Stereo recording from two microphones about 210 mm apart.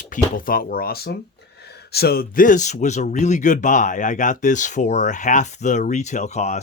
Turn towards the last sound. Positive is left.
turn(degrees=35)  # may be behind; listen again after turning